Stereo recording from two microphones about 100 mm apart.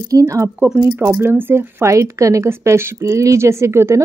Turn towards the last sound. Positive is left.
turn(degrees=-25)  # may be behind; listen again after turning